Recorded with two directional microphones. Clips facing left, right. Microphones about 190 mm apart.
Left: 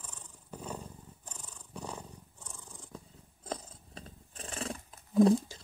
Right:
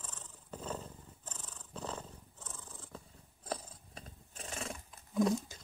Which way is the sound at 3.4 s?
25° left (ahead or behind).